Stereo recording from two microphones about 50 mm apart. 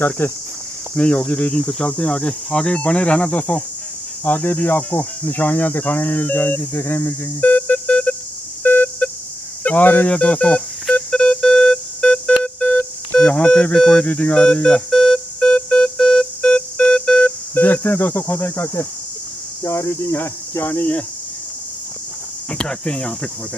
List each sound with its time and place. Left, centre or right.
0.2 s speech: left
0.9 s speech: left
1.6 s speech: centre
3.3 s speech: left
6.7 s music: left
9.6 s speech: left
10.1 s speech: left
10.9 s music: centre
17.6 s speech: left
18.6 s speech: left
19.6 s speech: left
22.5 s speech: centre